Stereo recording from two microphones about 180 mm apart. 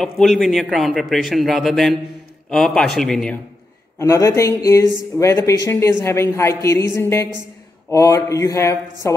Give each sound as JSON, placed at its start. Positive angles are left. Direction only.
{"t": 0.0, "sound": "a man's voice", "side_deg": 0}
{"t": 4.0, "sound": "a woman's voice", "side_deg": 15}